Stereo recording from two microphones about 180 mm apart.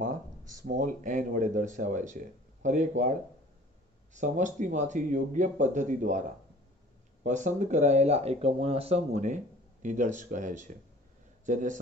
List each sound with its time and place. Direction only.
0.0 s speech: 50° right (ahead or behind)
4.1 s speech: 45° right (ahead or behind)
7.2 s speech: 40° right (ahead or behind)